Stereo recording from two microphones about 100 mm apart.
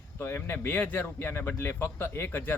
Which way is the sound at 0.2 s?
25° left (ahead or behind).